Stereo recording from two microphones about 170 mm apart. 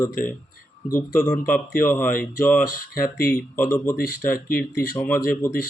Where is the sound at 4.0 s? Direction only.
60° left (ahead or behind).